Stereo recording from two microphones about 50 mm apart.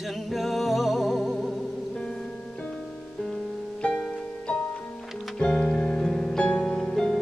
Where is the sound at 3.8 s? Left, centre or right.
Left.